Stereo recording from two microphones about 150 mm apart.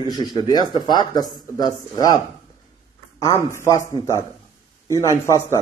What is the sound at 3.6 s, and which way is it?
Speech, 20° left (ahead or behind).